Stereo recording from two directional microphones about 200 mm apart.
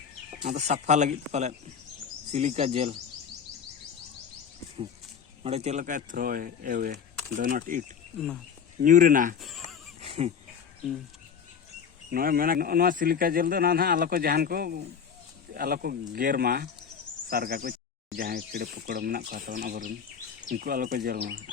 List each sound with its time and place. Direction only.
0.4 s speech: 35° right (ahead or behind)
5.4 s a man's voice: 30° right (ahead or behind)
10.0 s a sound: 30° right (ahead or behind)
12.1 s a man's voice: 45° right (ahead or behind)